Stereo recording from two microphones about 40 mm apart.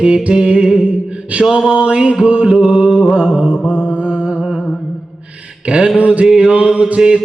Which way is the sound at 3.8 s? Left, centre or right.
Right.